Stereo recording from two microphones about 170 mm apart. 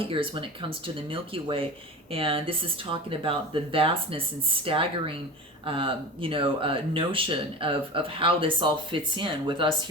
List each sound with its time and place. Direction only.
0.0 s speech: 30° right (ahead or behind)